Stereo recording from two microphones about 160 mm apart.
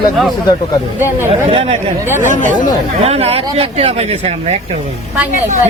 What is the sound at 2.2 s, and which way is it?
Speech, 50° left (ahead or behind).